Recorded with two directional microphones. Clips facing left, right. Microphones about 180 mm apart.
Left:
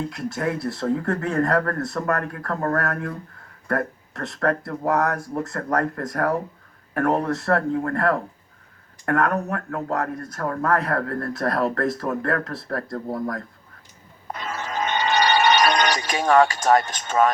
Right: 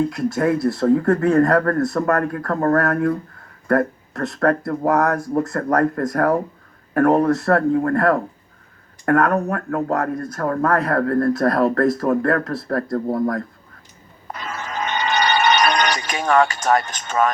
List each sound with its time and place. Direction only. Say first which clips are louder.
0.1 s speech: right 7 dB; 45° right (ahead or behind)
14.3 s music: even; 25° left (ahead or behind)